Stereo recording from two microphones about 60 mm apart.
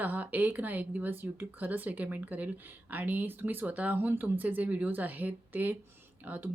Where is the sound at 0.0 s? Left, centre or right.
Right.